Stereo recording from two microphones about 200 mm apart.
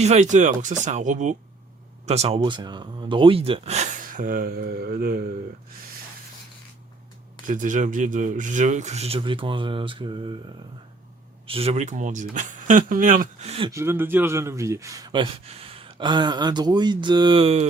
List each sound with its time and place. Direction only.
0.0 s speech: 35° right (ahead or behind)
7.4 s speech: 40° right (ahead or behind); by 10.3 s 25° right (ahead or behind)
11.4 s speech: 30° right (ahead or behind)
13.7 s speech: 15° right (ahead or behind); by 17.7 s 30° right (ahead or behind)